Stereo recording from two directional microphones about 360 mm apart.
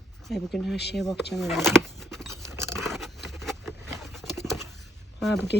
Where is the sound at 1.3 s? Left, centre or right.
Centre.